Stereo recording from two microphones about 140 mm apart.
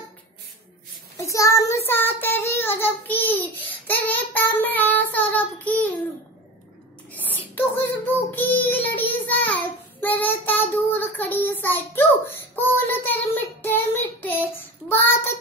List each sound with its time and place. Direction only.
1.1 s child singing: 20° left (ahead or behind)
7.2 s child singing: 15° left (ahead or behind)